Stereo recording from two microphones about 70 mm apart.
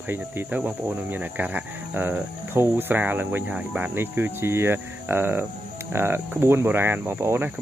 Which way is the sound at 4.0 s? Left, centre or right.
Right.